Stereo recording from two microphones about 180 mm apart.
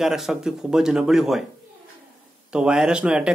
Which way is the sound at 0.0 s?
Centre (ahead or behind).